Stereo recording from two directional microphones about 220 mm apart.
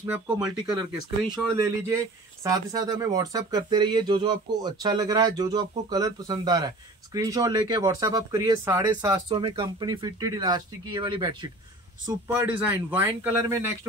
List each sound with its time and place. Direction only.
0.0 s speech: 10° right (ahead or behind)
1.5 s speech: 15° right (ahead or behind)